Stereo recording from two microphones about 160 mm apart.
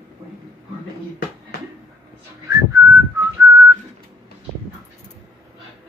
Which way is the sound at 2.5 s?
20° right (ahead or behind).